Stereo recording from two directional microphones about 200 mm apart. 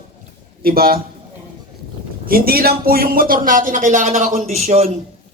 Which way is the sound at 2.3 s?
45° right (ahead or behind).